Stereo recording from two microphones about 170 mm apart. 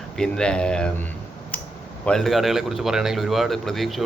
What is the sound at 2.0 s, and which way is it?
A man's voice, centre (ahead or behind).